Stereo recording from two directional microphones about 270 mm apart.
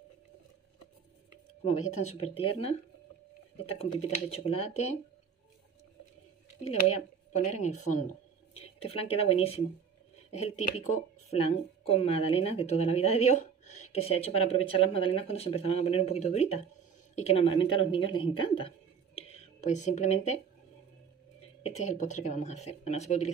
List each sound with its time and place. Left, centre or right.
2.0 s a woman's voice: left
3.6 s a woman's voice: left
6.6 s a woman's voice: left
19.1 s whispering: left
21.6 s a woman's voice: left